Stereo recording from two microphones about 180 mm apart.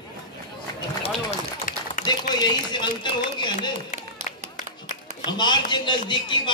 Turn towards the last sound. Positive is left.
turn(degrees=25)  # may be behind; listen again after turning